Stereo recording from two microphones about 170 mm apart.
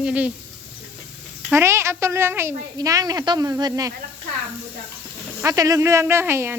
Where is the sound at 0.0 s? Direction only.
5° right (ahead or behind).